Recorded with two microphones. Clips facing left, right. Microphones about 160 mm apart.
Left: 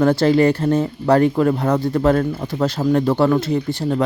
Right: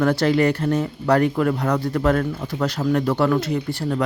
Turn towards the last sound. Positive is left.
turn(degrees=25)  # may be behind; listen again after turning